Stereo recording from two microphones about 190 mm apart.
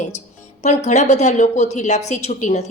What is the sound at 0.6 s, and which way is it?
A woman's voice, 40° left (ahead or behind).